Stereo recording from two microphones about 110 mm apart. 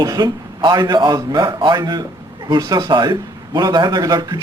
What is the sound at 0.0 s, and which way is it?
A man's voice, 35° right (ahead or behind).